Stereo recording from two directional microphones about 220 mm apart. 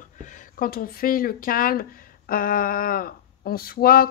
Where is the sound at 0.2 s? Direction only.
40° left (ahead or behind).